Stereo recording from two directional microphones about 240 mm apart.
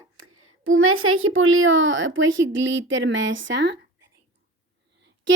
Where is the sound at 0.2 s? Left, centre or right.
Right.